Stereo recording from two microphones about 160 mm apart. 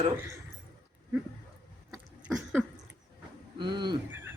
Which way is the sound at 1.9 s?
5° right (ahead or behind).